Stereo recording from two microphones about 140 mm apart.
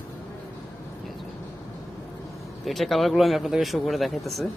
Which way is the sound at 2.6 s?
Centre (ahead or behind).